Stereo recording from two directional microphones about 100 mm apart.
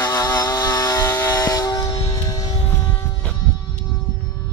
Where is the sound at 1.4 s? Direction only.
35° left (ahead or behind).